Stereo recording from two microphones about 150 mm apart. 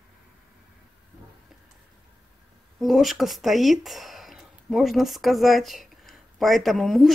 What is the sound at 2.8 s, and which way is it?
Speech, centre (ahead or behind).